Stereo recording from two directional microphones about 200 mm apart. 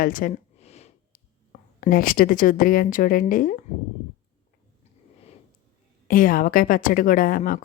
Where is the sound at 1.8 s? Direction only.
45° left (ahead or behind).